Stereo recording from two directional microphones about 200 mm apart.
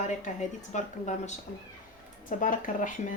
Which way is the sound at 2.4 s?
40° left (ahead or behind).